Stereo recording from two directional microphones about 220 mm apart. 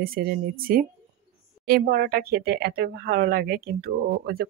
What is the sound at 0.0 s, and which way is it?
Speech, 40° right (ahead or behind).